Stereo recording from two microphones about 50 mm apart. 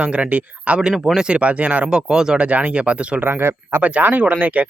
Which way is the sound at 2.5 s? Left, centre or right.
Right.